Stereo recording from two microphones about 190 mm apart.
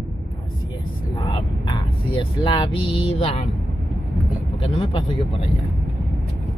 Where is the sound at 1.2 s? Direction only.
20° left (ahead or behind).